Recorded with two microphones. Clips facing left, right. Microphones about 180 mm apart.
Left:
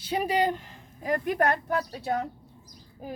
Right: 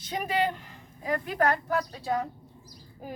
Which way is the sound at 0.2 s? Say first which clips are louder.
Left 2 dB; 35° left (ahead or behind).